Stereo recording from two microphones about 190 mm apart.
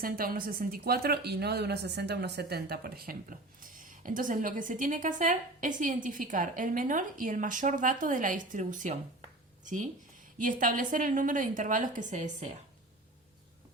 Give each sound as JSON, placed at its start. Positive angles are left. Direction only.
{"t": 0.0, "sound": "a woman's voice", "side_deg": -50}